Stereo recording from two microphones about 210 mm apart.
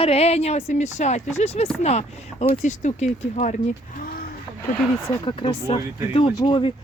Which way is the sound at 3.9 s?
45° left (ahead or behind).